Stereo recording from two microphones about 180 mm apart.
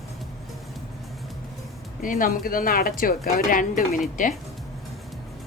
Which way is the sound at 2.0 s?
50° left (ahead or behind).